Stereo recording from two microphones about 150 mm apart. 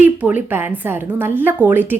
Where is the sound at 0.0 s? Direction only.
10° right (ahead or behind).